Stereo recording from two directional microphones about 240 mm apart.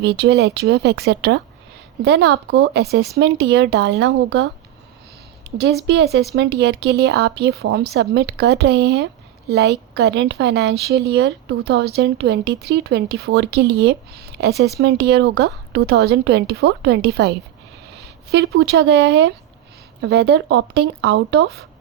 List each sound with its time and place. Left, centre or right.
0.0 s speech: right
5.5 s speech: right